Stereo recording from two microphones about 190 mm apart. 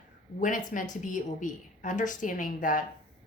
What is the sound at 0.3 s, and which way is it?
A woman's voice, 40° left (ahead or behind).